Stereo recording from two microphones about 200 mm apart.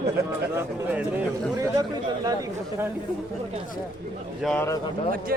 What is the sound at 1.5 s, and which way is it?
Speech, 20° right (ahead or behind).